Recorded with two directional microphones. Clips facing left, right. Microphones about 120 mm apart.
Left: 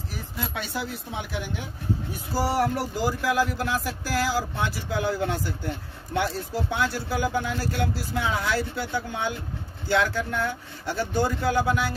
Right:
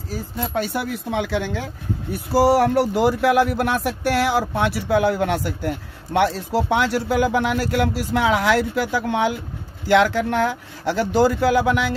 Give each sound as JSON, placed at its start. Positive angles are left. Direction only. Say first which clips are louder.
{"t": 0.1, "sound": "speech", "louder": "right 9 dB", "side_deg": -35}
{"t": 0.7, "sound": "speech", "louder": "right 8 dB", "side_deg": -70}
{"t": 2.3, "sound": "speech", "louder": "right 9 dB", "side_deg": -65}